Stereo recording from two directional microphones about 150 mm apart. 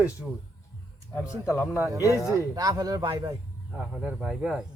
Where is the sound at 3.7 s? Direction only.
5° right (ahead or behind).